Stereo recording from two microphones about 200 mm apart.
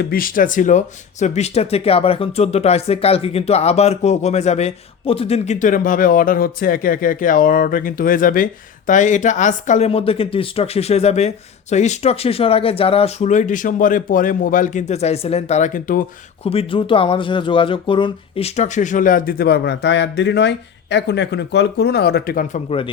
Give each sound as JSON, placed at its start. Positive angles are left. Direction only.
{"t": 0.0, "sound": "speech", "side_deg": 45}
{"t": 16.4, "sound": "speech", "side_deg": 30}